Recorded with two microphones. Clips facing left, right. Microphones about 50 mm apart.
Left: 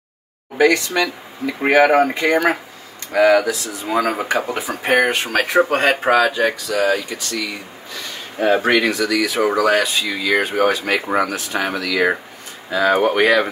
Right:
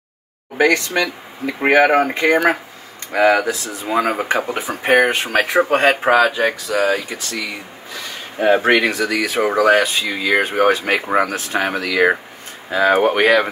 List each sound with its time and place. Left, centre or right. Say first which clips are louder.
0.6 s speech: even; centre
2.1 s speech: right 2 dB; right